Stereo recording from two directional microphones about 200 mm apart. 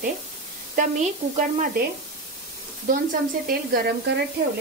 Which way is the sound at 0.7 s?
40° right (ahead or behind).